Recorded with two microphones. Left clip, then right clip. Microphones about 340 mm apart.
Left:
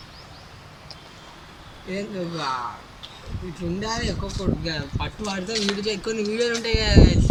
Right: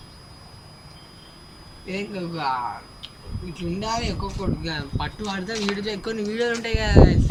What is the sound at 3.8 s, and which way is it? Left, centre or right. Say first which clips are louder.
Speech: right 2 dB; centre.